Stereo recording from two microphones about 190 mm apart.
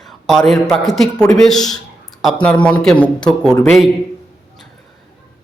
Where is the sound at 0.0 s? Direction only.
Centre (ahead or behind).